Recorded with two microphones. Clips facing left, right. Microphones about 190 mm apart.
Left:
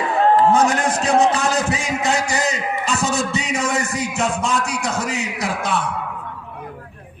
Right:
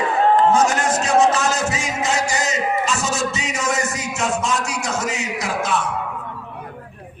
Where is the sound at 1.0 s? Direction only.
35° left (ahead or behind).